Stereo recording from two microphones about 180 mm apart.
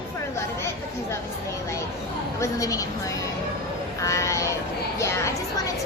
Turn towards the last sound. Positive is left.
turn(degrees=15)  # may be behind; listen again after turning